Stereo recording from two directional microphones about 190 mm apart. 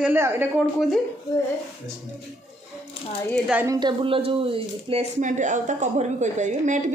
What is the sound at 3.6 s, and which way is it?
Speech, 20° right (ahead or behind).